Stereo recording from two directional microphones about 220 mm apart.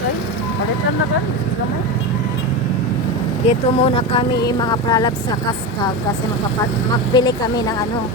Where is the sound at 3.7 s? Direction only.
25° left (ahead or behind).